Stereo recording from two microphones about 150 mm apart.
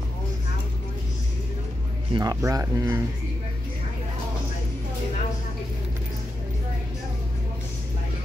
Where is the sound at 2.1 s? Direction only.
25° right (ahead or behind).